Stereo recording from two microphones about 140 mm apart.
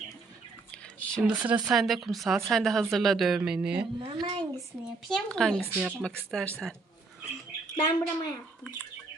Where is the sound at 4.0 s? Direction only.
35° right (ahead or behind).